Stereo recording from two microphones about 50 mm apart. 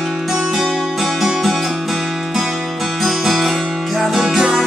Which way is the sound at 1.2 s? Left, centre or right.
Centre.